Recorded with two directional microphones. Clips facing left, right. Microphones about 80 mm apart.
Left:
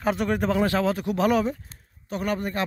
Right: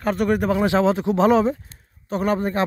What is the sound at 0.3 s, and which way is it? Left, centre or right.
Speech, centre.